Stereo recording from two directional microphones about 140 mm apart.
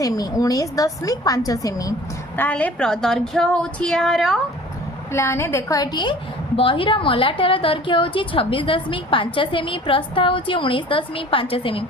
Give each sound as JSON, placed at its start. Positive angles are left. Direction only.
{"t": 0.0, "sound": "a woman's voice", "side_deg": 25}
{"t": 2.3, "sound": "a woman's voice", "side_deg": 10}
{"t": 5.1, "sound": "a woman's voice", "side_deg": 20}